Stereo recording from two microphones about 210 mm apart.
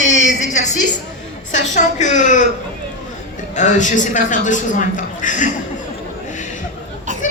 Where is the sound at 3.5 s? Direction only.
35° left (ahead or behind).